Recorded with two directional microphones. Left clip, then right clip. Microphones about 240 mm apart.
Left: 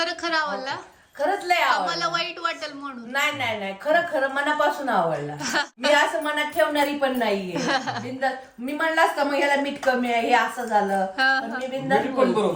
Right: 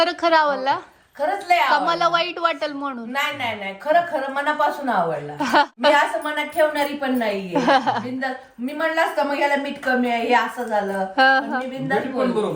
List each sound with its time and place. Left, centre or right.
0.0 s a woman's voice: centre